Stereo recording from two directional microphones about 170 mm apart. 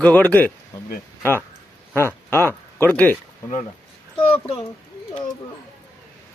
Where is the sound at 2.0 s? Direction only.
15° left (ahead or behind).